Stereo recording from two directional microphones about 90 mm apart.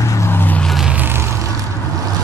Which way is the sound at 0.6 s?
Centre (ahead or behind).